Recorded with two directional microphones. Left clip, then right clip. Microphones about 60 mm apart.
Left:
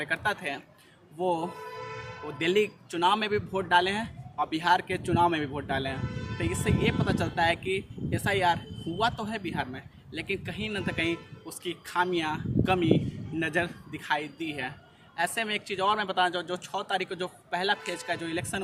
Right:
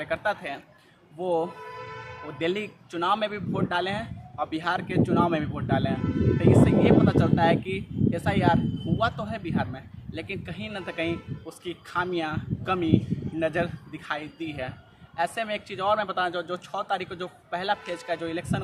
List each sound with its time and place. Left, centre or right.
0.0 s a man's voice: right